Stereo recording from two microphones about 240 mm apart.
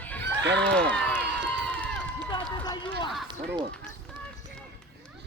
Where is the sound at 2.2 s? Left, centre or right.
Centre.